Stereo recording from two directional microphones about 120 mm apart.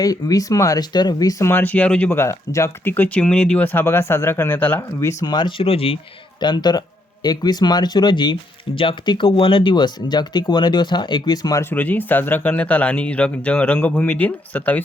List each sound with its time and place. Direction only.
0.0 s speech: 30° left (ahead or behind); by 2.0 s 10° left (ahead or behind)
2.0 s speech: 20° left (ahead or behind)
5.2 s speech: 35° left (ahead or behind)
6.4 s speech: 35° left (ahead or behind)
11.6 s speech: 15° left (ahead or behind)